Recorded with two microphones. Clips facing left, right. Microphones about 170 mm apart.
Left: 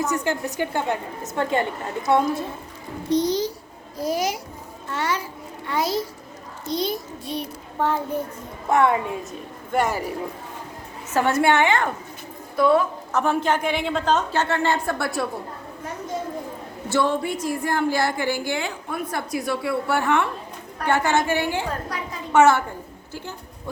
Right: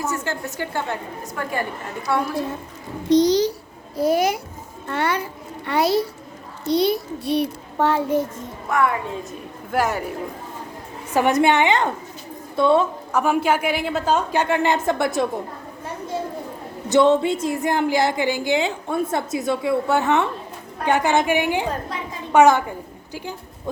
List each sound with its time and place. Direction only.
0.0 s a woman's voice: 15° left (ahead or behind)
3.1 s a child's voice: 90° right
3.9 s a child's voice: 60° right (ahead or behind); by 8.3 s 85° right
8.7 s a woman's voice: 25° left (ahead or behind)
9.7 s speech: centre (ahead or behind)
11.1 s a woman's voice: 15° right (ahead or behind)
13.1 s a woman's voice: 10° right (ahead or behind)
16.9 s a woman's voice: 20° right (ahead or behind)